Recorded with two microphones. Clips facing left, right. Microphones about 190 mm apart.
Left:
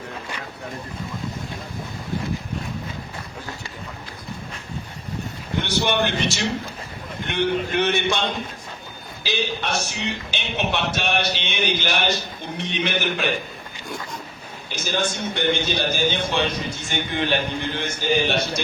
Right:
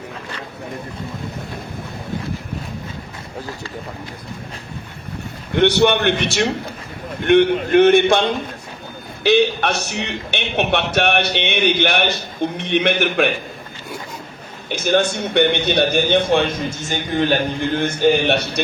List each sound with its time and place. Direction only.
5.5 s a man's voice: 65° right (ahead or behind)
9.2 s a man's voice: 65° right (ahead or behind)
14.7 s a man's voice: 60° right (ahead or behind)